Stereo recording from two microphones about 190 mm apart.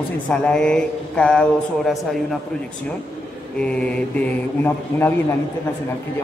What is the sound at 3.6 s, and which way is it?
Mantra, 5° left (ahead or behind).